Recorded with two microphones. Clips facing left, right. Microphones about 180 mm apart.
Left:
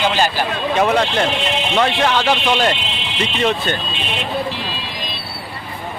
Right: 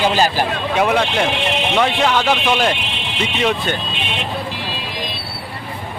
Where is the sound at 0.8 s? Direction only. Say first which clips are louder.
Even; 10° right (ahead or behind).